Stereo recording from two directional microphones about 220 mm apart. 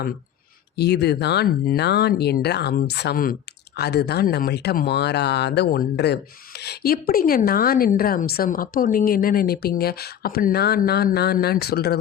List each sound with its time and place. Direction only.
0.8 s speech: 50° left (ahead or behind)